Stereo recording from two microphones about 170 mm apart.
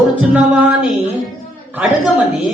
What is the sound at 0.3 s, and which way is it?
Speech, 5° right (ahead or behind).